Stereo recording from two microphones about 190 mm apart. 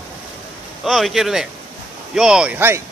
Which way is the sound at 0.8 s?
Centre (ahead or behind).